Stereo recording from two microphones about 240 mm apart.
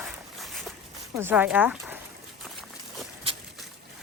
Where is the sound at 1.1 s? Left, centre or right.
Centre.